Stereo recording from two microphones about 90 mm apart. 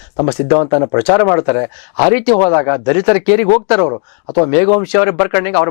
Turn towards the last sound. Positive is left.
turn(degrees=15)  # may be behind; listen again after turning